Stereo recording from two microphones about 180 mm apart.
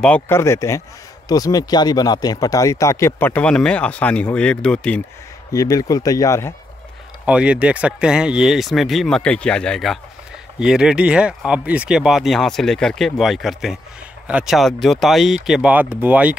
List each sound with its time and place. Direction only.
0.0 s speech: 10° left (ahead or behind)
5.5 s speech: 20° left (ahead or behind)
7.2 s speech: 5° right (ahead or behind)